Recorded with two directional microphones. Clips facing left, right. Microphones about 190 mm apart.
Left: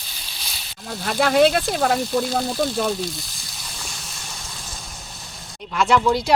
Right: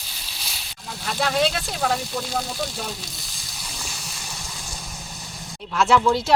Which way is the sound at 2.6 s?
55° left (ahead or behind).